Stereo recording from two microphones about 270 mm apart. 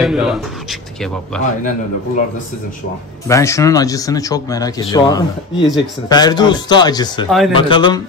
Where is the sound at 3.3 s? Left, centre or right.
Centre.